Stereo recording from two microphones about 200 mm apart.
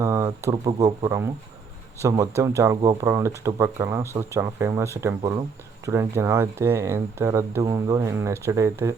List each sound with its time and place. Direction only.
0.0 s speech: 15° right (ahead or behind)